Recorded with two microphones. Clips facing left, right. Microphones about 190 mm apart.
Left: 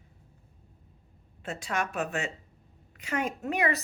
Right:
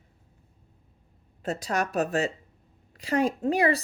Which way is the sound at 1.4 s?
40° right (ahead or behind).